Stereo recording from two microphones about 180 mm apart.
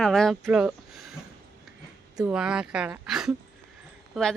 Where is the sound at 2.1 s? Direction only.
5° right (ahead or behind).